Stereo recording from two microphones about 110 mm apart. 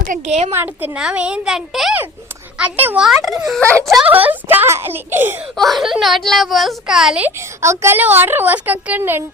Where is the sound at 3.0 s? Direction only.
Centre (ahead or behind).